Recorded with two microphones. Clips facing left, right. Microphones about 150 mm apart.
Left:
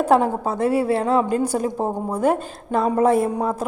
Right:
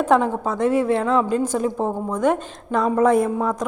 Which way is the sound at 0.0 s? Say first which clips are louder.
Left 1 dB; 35° left (ahead or behind).